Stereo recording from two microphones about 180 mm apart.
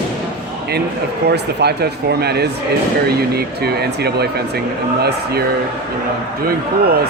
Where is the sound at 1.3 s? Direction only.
65° right (ahead or behind).